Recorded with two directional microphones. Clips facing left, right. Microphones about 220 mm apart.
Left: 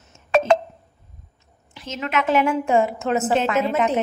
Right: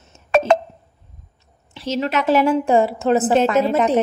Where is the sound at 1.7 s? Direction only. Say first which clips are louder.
Right 6 dB; 30° right (ahead or behind).